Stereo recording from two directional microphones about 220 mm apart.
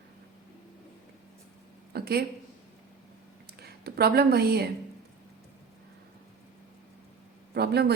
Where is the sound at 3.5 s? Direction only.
45° right (ahead or behind).